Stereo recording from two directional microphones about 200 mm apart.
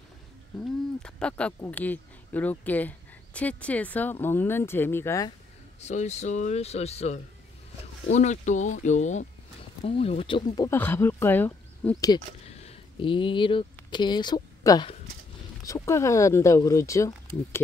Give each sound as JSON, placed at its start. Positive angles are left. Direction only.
{"t": 1.0, "sound": "speech", "side_deg": 5}
{"t": 5.8, "sound": "speech", "side_deg": 35}
{"t": 12.4, "sound": "speech", "side_deg": 30}